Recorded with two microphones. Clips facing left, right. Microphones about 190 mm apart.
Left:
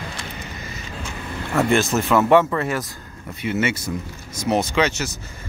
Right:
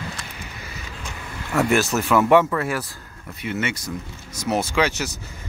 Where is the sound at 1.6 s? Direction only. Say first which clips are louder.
Left 1 dB; 5° right (ahead or behind).